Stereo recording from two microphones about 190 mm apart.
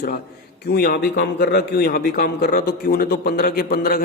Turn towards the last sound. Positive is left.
turn(degrees=50)  # may be behind; listen again after turning